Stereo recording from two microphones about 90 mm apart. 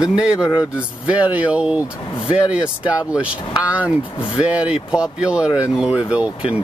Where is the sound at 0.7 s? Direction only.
15° right (ahead or behind).